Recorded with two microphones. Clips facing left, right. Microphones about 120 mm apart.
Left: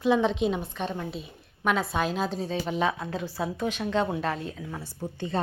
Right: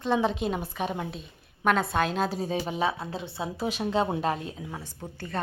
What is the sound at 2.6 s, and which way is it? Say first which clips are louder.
Speech: left 1 dB; 30° right (ahead or behind).